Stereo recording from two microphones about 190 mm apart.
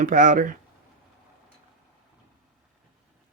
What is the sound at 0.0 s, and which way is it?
Speech, 40° right (ahead or behind).